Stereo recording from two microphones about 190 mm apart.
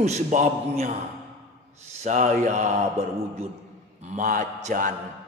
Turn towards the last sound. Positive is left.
turn(degrees=-40)  # may be behind; listen again after turning